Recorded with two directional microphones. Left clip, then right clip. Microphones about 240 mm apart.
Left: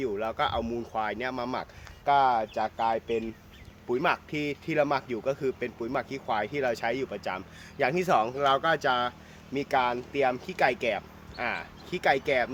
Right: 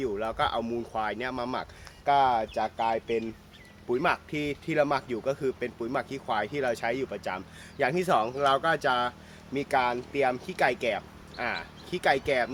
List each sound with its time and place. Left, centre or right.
0.0 s a man's voice: centre